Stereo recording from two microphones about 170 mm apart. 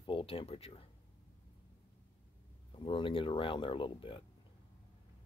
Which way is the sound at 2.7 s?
30° left (ahead or behind).